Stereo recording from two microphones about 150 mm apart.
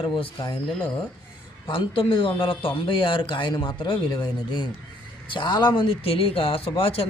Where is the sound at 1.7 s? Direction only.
35° left (ahead or behind).